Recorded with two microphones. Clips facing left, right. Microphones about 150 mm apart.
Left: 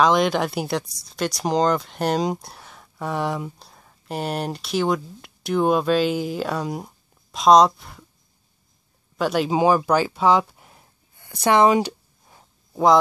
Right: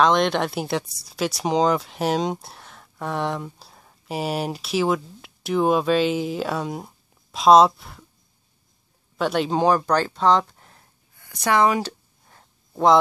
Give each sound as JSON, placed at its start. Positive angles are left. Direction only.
{"t": 0.0, "sound": "speech", "side_deg": 0}
{"t": 9.1, "sound": "speech", "side_deg": 0}
{"t": 11.1, "sound": "speech", "side_deg": 25}
{"t": 12.3, "sound": "a sound", "side_deg": 5}